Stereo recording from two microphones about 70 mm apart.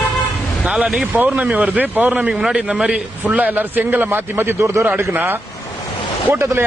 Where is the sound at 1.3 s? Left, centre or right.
Centre.